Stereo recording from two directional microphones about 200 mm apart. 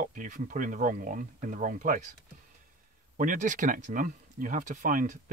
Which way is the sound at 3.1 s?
40° right (ahead or behind).